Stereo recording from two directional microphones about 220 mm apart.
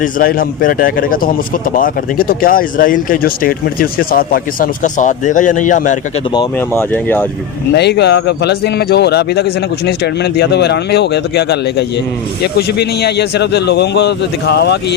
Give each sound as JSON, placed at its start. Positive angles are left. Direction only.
{"t": 0.0, "sound": "speech", "side_deg": 40}
{"t": 6.6, "sound": "speech", "side_deg": 10}
{"t": 7.7, "sound": "a man's voice", "side_deg": 50}